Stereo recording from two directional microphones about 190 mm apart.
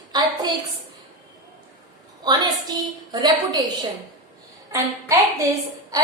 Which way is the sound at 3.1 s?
20° right (ahead or behind).